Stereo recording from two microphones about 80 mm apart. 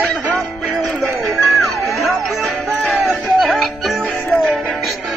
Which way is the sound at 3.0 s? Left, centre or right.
Centre.